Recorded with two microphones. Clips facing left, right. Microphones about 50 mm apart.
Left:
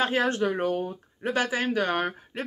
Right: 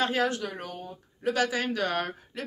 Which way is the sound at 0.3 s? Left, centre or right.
Left.